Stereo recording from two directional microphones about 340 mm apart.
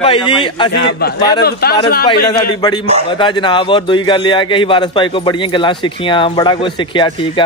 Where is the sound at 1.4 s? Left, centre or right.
Left.